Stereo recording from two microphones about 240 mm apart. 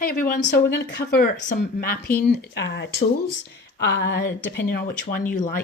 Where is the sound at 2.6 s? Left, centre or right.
Left.